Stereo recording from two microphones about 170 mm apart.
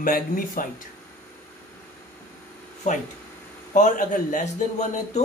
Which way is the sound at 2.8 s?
45° left (ahead or behind).